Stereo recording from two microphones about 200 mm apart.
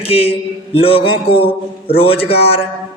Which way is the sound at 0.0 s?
30° left (ahead or behind).